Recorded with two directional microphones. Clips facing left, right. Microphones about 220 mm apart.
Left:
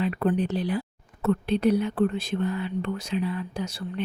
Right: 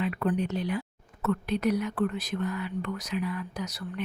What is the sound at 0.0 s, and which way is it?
Speech, 35° left (ahead or behind).